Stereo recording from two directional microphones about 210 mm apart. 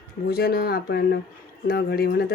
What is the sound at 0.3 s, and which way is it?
Speech, 45° left (ahead or behind).